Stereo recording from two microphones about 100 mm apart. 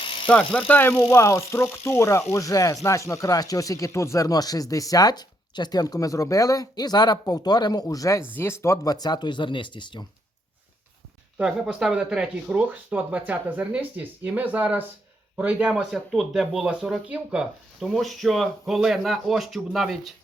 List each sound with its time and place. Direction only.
0.0 s bicycle: 55° left (ahead or behind)
0.3 s speech: 10° left (ahead or behind); by 10.1 s 50° left (ahead or behind)
11.3 s speech: 5° right (ahead or behind)